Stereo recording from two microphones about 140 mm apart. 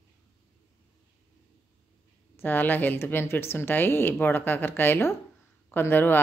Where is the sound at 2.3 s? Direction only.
15° left (ahead or behind).